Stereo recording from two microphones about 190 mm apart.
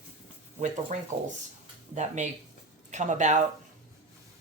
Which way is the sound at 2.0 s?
40° right (ahead or behind).